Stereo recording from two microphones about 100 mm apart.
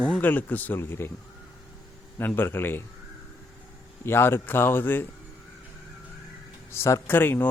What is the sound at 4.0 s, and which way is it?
Speech, 25° left (ahead or behind).